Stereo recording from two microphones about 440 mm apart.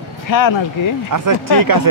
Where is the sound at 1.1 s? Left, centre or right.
Right.